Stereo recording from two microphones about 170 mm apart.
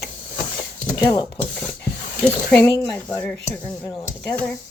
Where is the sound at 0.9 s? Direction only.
20° left (ahead or behind).